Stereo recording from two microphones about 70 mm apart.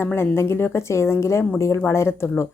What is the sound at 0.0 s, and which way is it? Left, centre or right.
A woman's voice, left.